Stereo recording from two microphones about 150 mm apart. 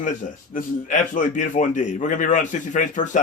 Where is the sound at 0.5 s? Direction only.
60° left (ahead or behind).